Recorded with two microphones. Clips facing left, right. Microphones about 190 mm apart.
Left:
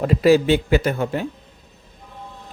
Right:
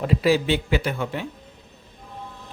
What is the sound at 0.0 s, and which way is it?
A man's voice, 45° left (ahead or behind).